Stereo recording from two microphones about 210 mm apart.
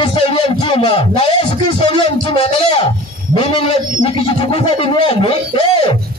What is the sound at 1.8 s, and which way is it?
A man's voice, 25° left (ahead or behind).